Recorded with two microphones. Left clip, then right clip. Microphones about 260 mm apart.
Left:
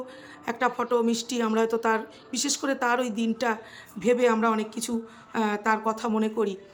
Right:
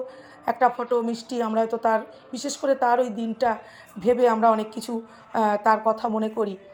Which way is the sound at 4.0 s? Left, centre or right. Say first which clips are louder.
Right 3 dB; left.